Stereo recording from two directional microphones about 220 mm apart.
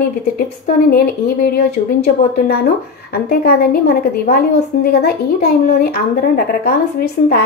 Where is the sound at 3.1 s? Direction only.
45° left (ahead or behind).